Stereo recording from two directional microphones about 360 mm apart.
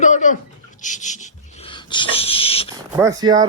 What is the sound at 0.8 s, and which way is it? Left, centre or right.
Dog, centre.